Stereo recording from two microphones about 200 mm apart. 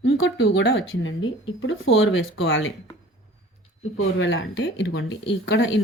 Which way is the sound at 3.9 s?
65° left (ahead or behind).